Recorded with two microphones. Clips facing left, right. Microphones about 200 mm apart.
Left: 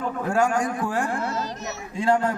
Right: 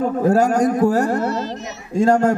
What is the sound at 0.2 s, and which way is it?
A man's voice, 40° right (ahead or behind).